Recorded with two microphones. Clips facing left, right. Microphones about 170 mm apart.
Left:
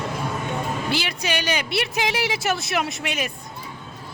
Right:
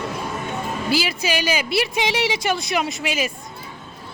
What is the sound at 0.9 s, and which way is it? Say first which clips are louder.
A woman's voice: right 7 dB; 5° right (ahead or behind).